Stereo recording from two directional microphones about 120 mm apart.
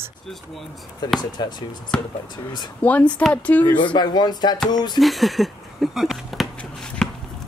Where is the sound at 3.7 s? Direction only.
40° left (ahead or behind).